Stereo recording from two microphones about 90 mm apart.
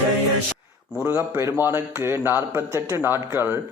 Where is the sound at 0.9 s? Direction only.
20° right (ahead or behind).